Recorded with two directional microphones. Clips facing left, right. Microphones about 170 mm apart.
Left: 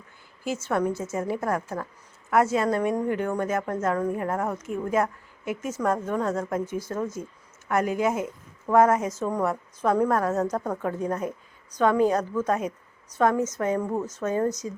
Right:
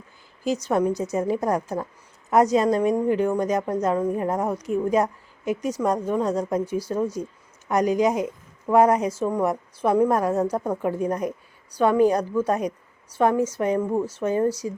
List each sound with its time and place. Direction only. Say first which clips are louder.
0.5 s a woman's voice: right 3 dB; 15° right (ahead or behind)
14.6 s a woman's voice: right 4 dB; 20° right (ahead or behind)